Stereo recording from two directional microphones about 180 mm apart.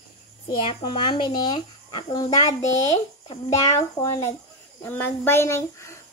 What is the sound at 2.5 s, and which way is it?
Speech, 40° left (ahead or behind).